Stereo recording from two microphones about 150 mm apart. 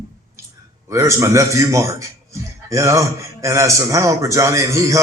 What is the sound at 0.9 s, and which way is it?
A man's voice, 20° right (ahead or behind).